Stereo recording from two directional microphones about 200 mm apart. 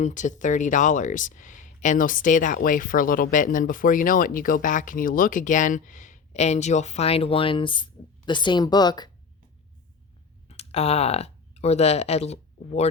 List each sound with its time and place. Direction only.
0.0 s speech: 40° left (ahead or behind); by 9.0 s 20° left (ahead or behind)
10.5 s speech: 30° left (ahead or behind)